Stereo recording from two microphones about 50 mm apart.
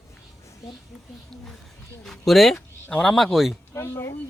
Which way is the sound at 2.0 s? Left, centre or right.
Centre.